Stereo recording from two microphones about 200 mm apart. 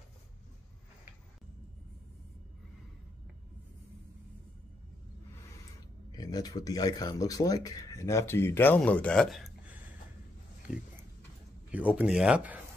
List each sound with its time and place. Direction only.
6.1 s speech: 20° left (ahead or behind); by 9.8 s centre (ahead or behind)
10.7 s a sound: centre (ahead or behind)
11.7 s speech: 5° right (ahead or behind)